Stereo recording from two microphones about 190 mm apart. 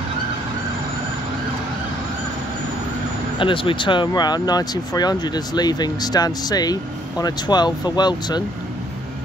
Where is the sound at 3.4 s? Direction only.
25° left (ahead or behind).